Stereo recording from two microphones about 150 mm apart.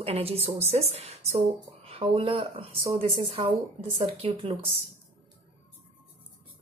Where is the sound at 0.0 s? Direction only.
40° right (ahead or behind).